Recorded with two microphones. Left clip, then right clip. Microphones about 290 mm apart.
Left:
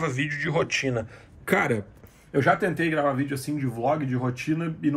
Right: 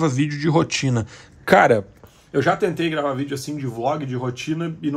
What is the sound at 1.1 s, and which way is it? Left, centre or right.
Speech, right.